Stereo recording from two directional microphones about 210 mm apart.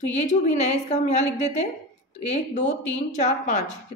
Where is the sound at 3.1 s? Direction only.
35° left (ahead or behind).